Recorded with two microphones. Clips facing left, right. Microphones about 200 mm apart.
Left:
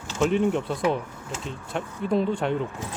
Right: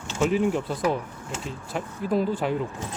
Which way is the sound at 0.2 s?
5° right (ahead or behind).